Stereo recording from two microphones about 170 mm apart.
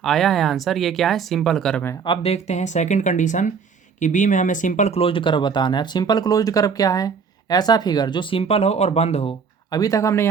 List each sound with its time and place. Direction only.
0.0 s speech: centre (ahead or behind)
2.0 s speech: 40° left (ahead or behind)
9.6 s speech: 20° left (ahead or behind)